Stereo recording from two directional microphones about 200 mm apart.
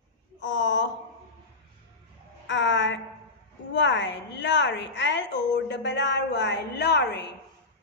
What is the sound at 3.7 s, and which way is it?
A woman's voice, 65° left (ahead or behind).